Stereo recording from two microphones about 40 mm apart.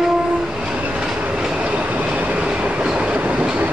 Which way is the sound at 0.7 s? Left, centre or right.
Right.